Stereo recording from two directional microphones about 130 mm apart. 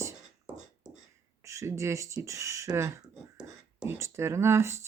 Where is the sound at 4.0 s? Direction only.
20° right (ahead or behind).